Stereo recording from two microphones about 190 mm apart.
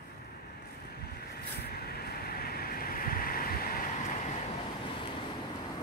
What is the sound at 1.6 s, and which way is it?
Vehicle, 55° left (ahead or behind).